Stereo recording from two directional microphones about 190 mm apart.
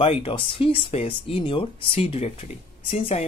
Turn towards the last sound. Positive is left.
turn(degrees=30)  # may be behind; listen again after turning